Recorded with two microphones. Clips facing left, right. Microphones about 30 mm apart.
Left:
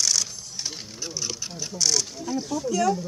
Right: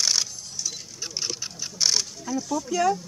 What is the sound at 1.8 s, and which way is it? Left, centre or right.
Speech, right.